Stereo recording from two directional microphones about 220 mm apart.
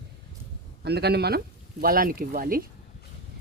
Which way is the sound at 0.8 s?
50° right (ahead or behind).